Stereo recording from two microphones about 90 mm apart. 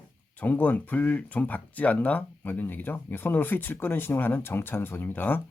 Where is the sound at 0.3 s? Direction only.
20° left (ahead or behind).